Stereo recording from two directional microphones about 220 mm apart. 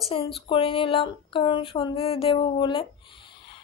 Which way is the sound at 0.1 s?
25° left (ahead or behind).